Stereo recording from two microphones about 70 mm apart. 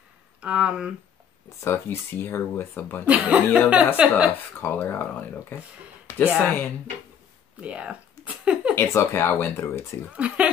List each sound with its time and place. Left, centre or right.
0.4 s speech: centre
1.6 s speech: left
3.1 s speech: centre
4.3 s speech: left
6.0 s a sound: left
7.6 s a sound: centre
8.7 s speech: left
10.1 s speech: centre